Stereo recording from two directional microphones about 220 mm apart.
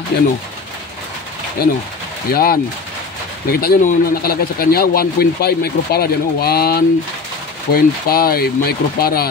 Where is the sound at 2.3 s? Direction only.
40° left (ahead or behind).